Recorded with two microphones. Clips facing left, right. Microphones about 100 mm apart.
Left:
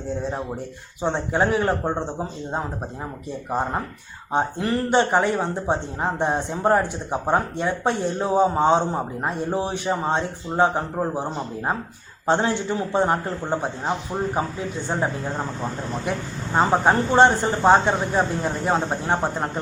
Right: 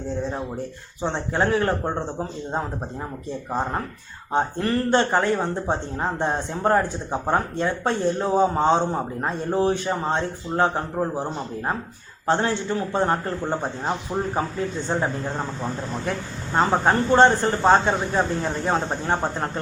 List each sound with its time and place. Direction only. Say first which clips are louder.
1.0 s speech: left 2 dB; 20° left (ahead or behind)
3.5 s speech: left 2 dB; 10° left (ahead or behind)
16.0 s speech: left 1 dB; 10° left (ahead or behind)